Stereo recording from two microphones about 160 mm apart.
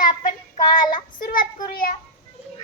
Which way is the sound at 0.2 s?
55° left (ahead or behind).